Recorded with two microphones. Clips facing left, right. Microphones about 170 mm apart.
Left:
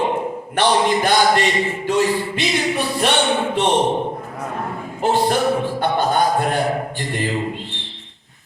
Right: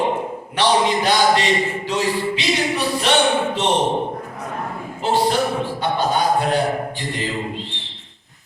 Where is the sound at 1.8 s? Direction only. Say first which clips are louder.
Left 3 dB; 50° left (ahead or behind).